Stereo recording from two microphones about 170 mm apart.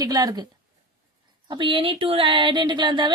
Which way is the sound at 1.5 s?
30° right (ahead or behind).